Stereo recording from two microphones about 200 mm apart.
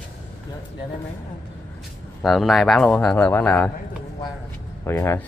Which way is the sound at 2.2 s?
Centre (ahead or behind).